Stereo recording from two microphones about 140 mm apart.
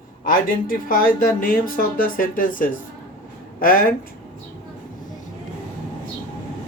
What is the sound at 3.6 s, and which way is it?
Speech, 90° left.